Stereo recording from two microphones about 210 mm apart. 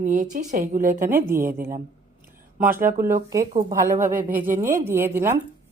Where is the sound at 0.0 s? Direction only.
40° right (ahead or behind).